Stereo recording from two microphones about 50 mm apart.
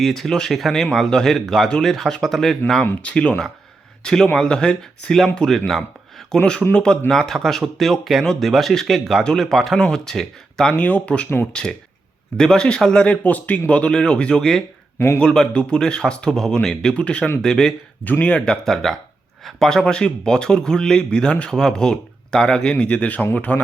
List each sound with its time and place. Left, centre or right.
0.0 s speech: centre
3.0 s speech: left
4.0 s speech: centre
6.4 s speech: left
7.1 s speech: centre
10.8 s speech: left
13.2 s speech: left; by 14.6 s centre
14.9 s speech: left
15.2 s speech: centre
17.4 s speech: centre
18.0 s speech: left
18.3 s speech: centre
19.8 s speech: centre